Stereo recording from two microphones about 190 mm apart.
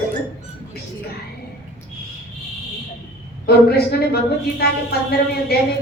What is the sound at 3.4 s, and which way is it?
Speech, 55° left (ahead or behind).